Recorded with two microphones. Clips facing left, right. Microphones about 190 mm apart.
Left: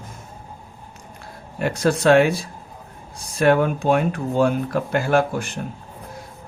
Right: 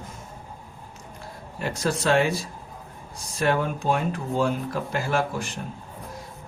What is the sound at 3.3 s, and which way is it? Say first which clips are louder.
Speech: left 7 dB; 60° left (ahead or behind).